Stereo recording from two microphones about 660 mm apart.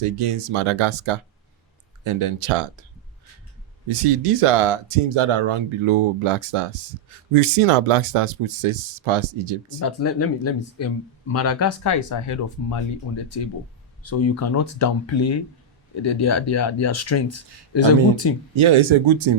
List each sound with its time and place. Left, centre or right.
0.0 s speech: right
3.8 s speech: right
9.8 s speech: left
16.0 s speech: left
18.5 s speech: right